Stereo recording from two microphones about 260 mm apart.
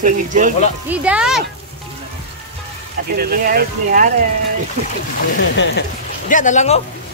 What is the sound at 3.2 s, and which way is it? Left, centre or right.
Speech, right.